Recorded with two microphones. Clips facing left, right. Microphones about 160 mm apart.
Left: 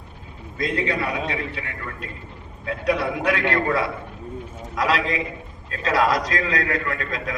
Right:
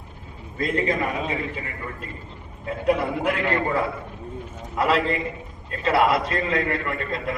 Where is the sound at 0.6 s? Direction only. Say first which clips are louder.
Right 1 dB; 75° left (ahead or behind).